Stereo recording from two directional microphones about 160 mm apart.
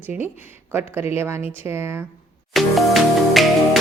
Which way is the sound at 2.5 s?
Centre (ahead or behind).